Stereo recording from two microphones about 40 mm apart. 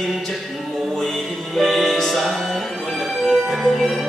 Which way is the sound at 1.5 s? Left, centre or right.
Centre.